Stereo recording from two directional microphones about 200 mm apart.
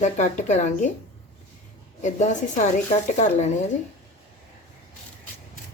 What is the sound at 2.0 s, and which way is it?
A woman's voice, 35° left (ahead or behind).